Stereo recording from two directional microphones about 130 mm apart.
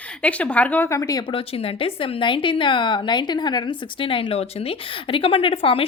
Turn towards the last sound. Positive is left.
turn(degrees=45)  # may be behind; listen again after turning